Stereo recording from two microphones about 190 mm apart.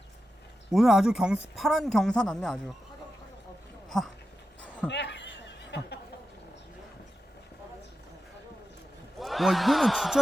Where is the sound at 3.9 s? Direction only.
Centre (ahead or behind).